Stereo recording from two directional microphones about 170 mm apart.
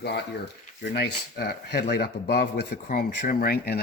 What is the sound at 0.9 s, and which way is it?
Speech, 75° left (ahead or behind).